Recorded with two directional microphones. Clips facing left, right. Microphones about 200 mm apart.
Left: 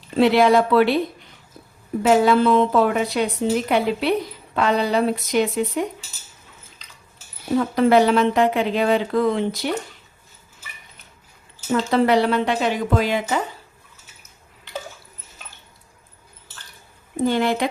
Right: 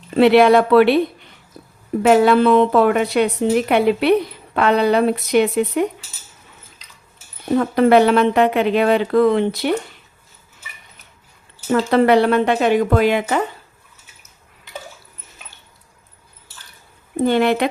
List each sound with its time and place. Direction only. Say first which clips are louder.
0.2 s a woman's voice: right 4 dB; 65° right (ahead or behind)
2.0 s a woman's voice: right 3 dB; 60° right (ahead or behind)
7.6 s a woman's voice: right 3 dB; 60° right (ahead or behind)
11.7 s a woman's voice: right 4 dB; 60° right (ahead or behind)
17.2 s a woman's voice: right 4 dB; 60° right (ahead or behind)